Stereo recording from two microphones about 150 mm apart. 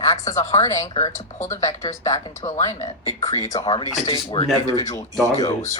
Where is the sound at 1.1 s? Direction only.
55° left (ahead or behind).